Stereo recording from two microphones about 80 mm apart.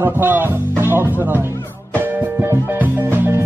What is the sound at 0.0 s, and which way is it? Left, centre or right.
Speech, right.